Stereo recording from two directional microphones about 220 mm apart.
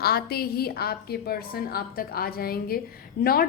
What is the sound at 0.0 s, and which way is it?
A woman's voice, 45° left (ahead or behind).